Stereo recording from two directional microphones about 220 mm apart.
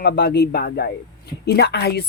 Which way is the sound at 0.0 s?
45° left (ahead or behind).